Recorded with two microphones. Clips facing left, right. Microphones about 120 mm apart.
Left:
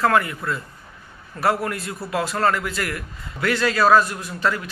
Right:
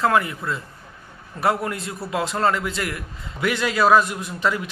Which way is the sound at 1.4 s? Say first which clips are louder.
Even; 20° right (ahead or behind).